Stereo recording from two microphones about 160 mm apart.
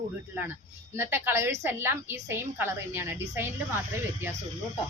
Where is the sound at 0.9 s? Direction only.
15° right (ahead or behind).